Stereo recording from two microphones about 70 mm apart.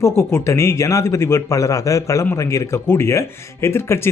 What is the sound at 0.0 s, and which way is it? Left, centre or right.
Speech, left.